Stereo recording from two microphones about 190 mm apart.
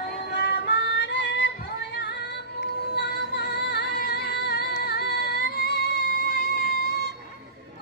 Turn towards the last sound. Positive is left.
turn(degrees=60)  # may be behind; listen again after turning